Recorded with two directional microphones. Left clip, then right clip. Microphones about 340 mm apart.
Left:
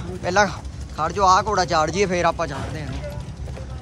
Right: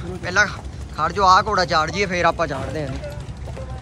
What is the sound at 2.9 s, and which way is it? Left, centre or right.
Vehicle, right.